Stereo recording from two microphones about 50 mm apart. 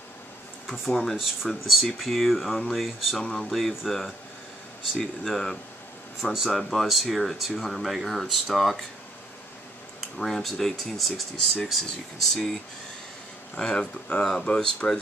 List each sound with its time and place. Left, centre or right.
0.7 s speech: centre
3.2 s speech: centre
3.5 s speech: centre
6.2 s speech: left
6.7 s speech: centre
10.1 s speech: centre
13.6 s speech: centre